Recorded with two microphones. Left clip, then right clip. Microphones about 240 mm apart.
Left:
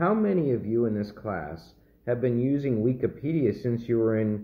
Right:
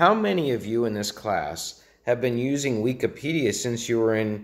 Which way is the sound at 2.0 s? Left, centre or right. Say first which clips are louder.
Right 3 dB; right.